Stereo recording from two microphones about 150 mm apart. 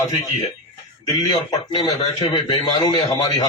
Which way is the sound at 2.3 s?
30° left (ahead or behind).